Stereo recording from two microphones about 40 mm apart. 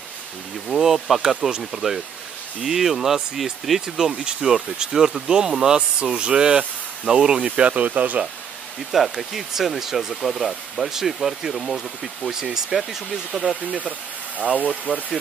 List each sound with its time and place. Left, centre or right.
0.7 s speech: centre
4.2 s speech: centre; by 8.2 s right
8.9 s speech: centre
14.9 s speech: left